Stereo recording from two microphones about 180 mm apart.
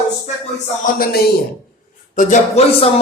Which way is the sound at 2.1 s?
40° left (ahead or behind).